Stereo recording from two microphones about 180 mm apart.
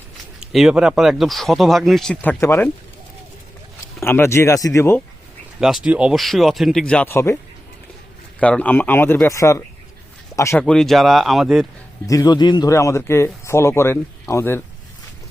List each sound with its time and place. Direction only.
0.3 s speech: 5° right (ahead or behind)
2.4 s speech: 15° left (ahead or behind)
4.0 s speech: 15° left (ahead or behind)
5.5 s speech: 5° right (ahead or behind); by 7.3 s 15° left (ahead or behind)
8.4 s speech: 5° left (ahead or behind)
10.6 s speech: 5° left (ahead or behind)
12.0 s speech: 20° left (ahead or behind)